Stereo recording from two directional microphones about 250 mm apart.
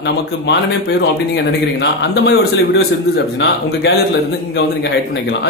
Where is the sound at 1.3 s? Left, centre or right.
Left.